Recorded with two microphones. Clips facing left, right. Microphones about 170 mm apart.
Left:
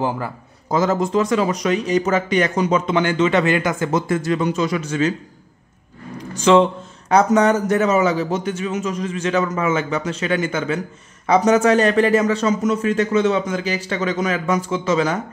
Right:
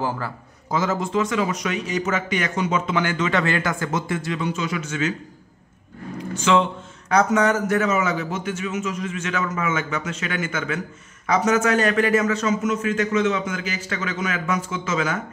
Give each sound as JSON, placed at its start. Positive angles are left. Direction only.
{"t": 0.7, "sound": "a man's voice", "side_deg": 40}
{"t": 3.9, "sound": "a man's voice", "side_deg": 40}
{"t": 6.3, "sound": "a man's voice", "side_deg": 35}